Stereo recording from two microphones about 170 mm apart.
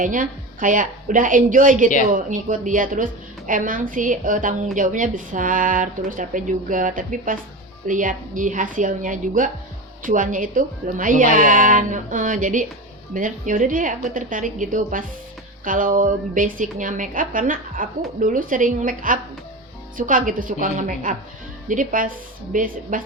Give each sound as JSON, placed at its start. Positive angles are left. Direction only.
{"t": 0.0, "sound": "a woman's voice", "side_deg": -50}